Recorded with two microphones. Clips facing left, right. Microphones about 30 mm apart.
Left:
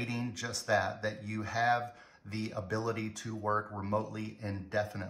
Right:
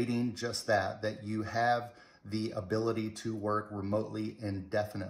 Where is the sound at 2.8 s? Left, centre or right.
Left.